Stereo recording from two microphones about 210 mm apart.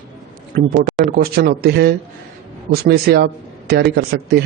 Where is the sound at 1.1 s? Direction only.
45° right (ahead or behind).